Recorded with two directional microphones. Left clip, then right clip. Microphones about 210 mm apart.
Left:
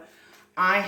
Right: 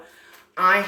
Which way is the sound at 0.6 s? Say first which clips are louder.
Right 4 dB; 15° right (ahead or behind).